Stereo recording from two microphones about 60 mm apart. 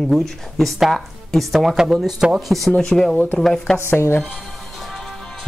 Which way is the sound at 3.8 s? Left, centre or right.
Left.